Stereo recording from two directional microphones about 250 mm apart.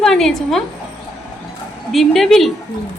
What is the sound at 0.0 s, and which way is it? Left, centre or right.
Speech, centre.